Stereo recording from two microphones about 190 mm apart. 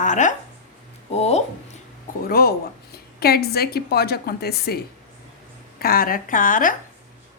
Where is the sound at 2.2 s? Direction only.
50° left (ahead or behind).